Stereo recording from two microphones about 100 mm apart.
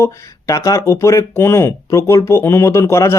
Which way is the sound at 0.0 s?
30° left (ahead or behind).